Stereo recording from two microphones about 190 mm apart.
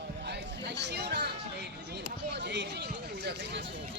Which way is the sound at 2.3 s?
65° right (ahead or behind).